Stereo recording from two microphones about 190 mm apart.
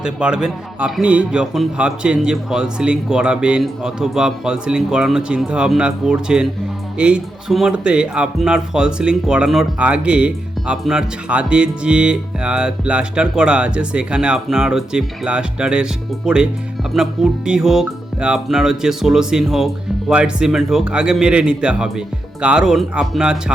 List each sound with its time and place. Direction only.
0.0 s speech: 5° right (ahead or behind)